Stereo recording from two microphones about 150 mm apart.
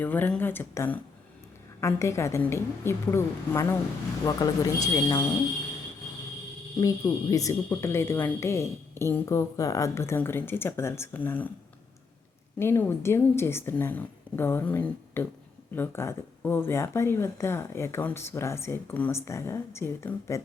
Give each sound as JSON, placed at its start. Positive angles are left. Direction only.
{"t": 0.0, "sound": "speech", "side_deg": 10}
{"t": 6.7, "sound": "speech", "side_deg": 20}
{"t": 12.5, "sound": "speech", "side_deg": 15}